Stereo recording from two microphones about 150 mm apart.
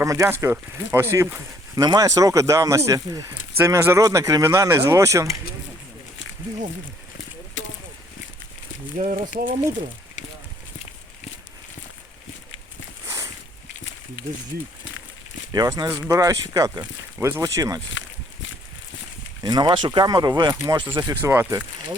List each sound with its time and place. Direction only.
0.0 s speech: 20° right (ahead or behind)
9.0 s speech: 60° right (ahead or behind)
13.1 s boat: 20° right (ahead or behind)
15.5 s speech: 25° right (ahead or behind)
19.4 s speech: 30° right (ahead or behind)
21.2 s speech: 15° right (ahead or behind)